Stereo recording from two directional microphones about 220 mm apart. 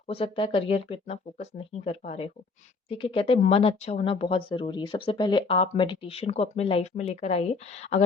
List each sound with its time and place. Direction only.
0.1 s speech: 25° left (ahead or behind)